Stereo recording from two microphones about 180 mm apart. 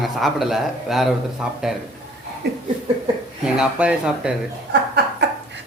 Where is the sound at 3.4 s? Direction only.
5° right (ahead or behind).